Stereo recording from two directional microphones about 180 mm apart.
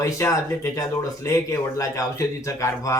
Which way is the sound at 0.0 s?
15° left (ahead or behind).